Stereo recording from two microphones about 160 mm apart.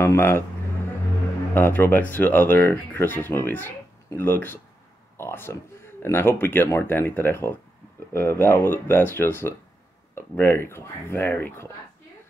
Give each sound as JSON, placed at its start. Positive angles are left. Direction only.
{"t": 0.0, "sound": "speech", "side_deg": 15}
{"t": 1.5, "sound": "speech", "side_deg": 15}
{"t": 5.1, "sound": "a sound", "side_deg": 15}
{"t": 6.0, "sound": "speech", "side_deg": 15}